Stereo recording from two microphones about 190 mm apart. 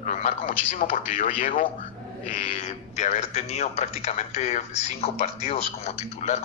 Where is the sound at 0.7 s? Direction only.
45° left (ahead or behind).